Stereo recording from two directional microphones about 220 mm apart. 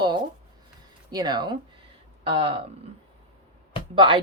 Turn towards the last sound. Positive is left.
turn(degrees=-25)  # may be behind; listen again after turning